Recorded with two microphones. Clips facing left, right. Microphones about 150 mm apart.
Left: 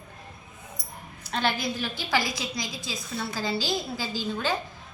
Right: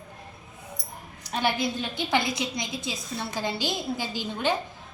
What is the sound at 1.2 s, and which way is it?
A woman's voice, 15° right (ahead or behind).